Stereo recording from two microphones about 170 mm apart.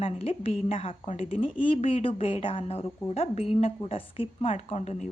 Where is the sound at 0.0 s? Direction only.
35° left (ahead or behind).